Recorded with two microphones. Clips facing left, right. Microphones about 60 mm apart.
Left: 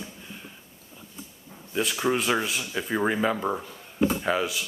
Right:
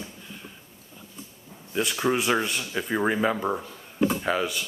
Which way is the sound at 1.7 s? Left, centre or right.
Centre.